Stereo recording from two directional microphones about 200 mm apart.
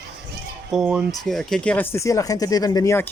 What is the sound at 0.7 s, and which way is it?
Speech, 5° right (ahead or behind).